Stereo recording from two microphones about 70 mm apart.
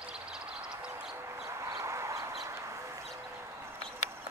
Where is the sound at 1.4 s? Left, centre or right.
Right.